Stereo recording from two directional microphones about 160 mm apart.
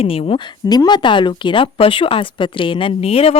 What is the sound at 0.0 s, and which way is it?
Speech, 35° left (ahead or behind).